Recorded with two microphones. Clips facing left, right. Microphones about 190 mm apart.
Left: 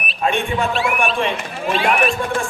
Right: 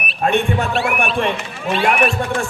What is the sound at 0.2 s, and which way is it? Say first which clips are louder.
Speech: right 2 dB; 60° right (ahead or behind).